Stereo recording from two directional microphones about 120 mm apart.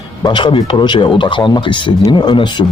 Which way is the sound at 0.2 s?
40° left (ahead or behind).